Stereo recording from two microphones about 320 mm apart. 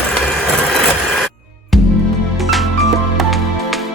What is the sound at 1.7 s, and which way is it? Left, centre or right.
Music, centre.